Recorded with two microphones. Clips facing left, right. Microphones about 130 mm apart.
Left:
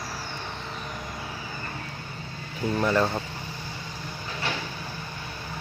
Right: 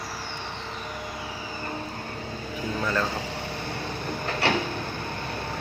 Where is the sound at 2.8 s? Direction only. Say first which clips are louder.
Left 4 dB; 15° left (ahead or behind).